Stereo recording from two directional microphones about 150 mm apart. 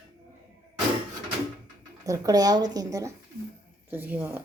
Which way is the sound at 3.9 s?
10° right (ahead or behind).